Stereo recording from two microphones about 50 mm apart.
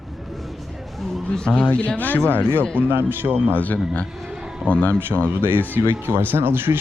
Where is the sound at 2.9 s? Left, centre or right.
Right.